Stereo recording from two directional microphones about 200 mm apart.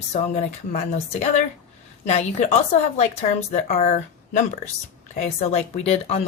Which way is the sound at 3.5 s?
35° left (ahead or behind).